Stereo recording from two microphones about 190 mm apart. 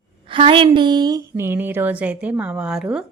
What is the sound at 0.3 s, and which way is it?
A woman's voice, 25° right (ahead or behind).